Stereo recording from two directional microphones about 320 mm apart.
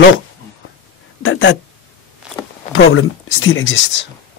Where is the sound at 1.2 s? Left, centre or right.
Left.